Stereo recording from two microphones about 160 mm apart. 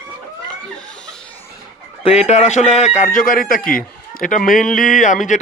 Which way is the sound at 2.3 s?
45° left (ahead or behind).